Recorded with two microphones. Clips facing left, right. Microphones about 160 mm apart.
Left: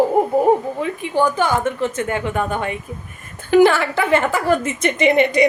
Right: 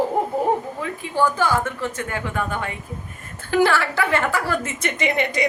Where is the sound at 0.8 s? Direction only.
20° left (ahead or behind).